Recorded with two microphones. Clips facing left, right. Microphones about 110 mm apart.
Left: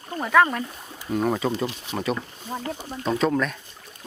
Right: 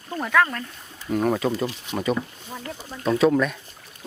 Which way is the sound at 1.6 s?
20° left (ahead or behind).